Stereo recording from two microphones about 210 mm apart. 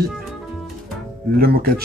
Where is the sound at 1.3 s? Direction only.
45° right (ahead or behind).